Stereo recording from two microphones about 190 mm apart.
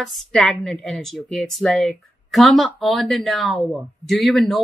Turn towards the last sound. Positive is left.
turn(degrees=0)  # may be behind; listen again after turning